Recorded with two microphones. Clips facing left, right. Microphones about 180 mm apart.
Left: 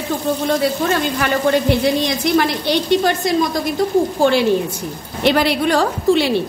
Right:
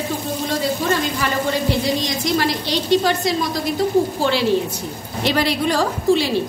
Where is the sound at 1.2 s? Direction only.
60° left (ahead or behind).